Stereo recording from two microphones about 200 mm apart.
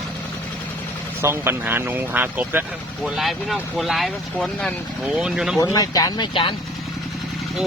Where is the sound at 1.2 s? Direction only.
10° right (ahead or behind).